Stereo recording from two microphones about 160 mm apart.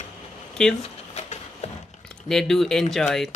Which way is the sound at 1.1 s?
40° left (ahead or behind).